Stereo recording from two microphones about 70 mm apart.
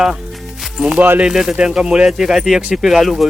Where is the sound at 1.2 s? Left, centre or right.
Centre.